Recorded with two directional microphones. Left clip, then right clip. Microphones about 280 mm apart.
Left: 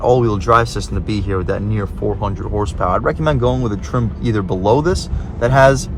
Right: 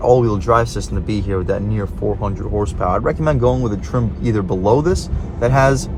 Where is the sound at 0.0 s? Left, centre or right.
Left.